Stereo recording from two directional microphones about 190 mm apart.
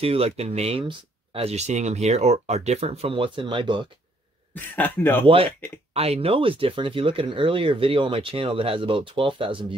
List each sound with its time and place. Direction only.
0.0 s speech: 30° right (ahead or behind)
4.7 s speech: 10° left (ahead or behind)
5.2 s speech: 30° right (ahead or behind)